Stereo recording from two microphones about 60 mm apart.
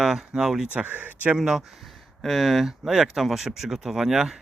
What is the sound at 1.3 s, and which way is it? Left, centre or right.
Speech, centre.